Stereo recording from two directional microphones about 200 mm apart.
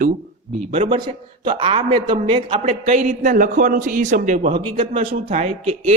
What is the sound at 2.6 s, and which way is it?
A man's voice, 35° right (ahead or behind).